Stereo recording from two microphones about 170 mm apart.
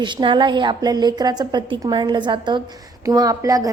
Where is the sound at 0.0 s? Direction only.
25° right (ahead or behind).